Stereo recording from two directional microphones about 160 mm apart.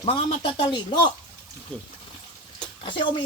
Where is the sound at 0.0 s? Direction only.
35° left (ahead or behind).